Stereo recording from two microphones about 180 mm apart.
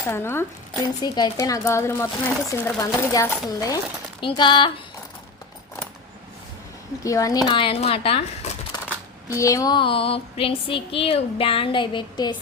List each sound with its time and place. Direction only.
0.0 s speech: 15° left (ahead or behind)
7.0 s speech: 20° left (ahead or behind)
9.3 s speech: 15° left (ahead or behind)